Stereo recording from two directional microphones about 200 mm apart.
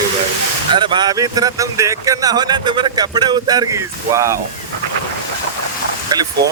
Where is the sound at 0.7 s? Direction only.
25° right (ahead or behind).